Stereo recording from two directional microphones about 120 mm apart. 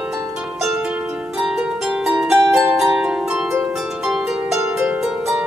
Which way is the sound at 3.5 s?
20° right (ahead or behind).